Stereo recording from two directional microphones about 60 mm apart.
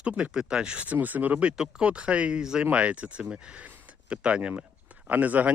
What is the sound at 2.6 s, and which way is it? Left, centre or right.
Speech, right.